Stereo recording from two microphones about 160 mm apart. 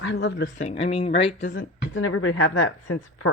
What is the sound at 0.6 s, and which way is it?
Speech, 40° left (ahead or behind).